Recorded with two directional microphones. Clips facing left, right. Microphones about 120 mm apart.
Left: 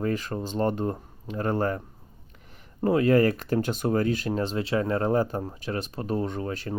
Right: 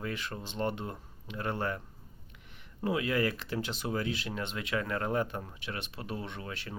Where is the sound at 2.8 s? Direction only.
45° left (ahead or behind).